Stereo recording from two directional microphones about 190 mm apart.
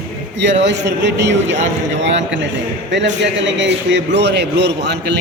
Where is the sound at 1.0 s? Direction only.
65° right (ahead or behind).